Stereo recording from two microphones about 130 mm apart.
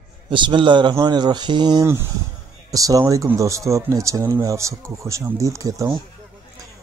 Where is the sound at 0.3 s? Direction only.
40° right (ahead or behind).